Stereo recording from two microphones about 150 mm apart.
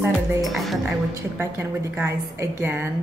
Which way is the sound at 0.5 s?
Centre (ahead or behind).